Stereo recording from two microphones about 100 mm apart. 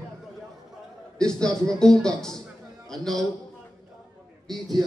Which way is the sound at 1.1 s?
5° left (ahead or behind).